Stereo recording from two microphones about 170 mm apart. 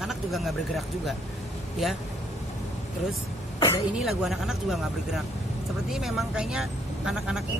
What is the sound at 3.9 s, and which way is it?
Speech, centre (ahead or behind).